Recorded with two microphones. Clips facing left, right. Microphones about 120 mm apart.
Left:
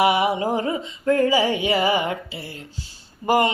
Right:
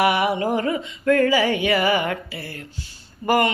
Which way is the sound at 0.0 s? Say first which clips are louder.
Left 1 dB; 20° left (ahead or behind).